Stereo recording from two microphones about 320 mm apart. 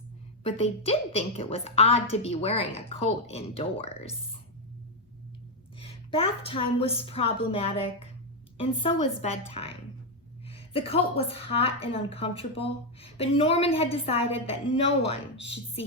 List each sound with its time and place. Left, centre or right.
0.4 s a woman's voice: centre
5.8 s a woman's voice: centre